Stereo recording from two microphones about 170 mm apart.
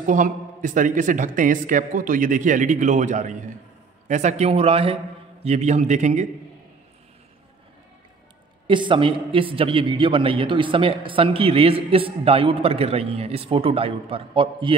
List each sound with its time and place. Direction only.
0.0 s a man's voice: 50° right (ahead or behind)
8.6 s a man's voice: 30° right (ahead or behind)